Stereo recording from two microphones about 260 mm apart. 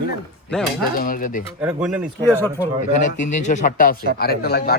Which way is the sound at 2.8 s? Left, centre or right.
Left.